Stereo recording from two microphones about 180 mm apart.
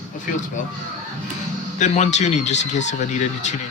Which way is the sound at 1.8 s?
40° left (ahead or behind).